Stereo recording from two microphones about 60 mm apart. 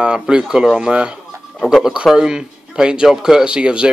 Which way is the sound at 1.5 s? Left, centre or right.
Centre.